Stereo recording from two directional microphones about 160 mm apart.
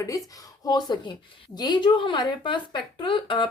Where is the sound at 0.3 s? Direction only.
25° left (ahead or behind).